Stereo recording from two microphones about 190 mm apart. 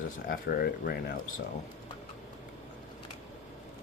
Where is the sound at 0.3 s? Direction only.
50° left (ahead or behind).